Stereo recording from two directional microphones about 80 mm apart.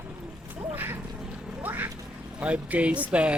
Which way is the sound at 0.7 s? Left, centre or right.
Right.